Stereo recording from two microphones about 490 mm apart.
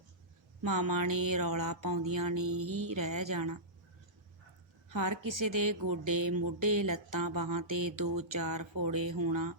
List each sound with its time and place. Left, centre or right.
0.6 s music: right
2.4 s music: right
2.9 s music: right
4.9 s music: right